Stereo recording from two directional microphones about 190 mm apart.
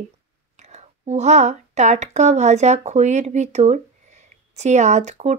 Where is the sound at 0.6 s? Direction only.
35° right (ahead or behind).